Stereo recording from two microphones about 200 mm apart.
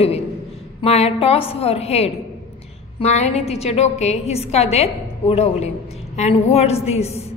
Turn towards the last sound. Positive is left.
turn(degrees=30)  # may be behind; listen again after turning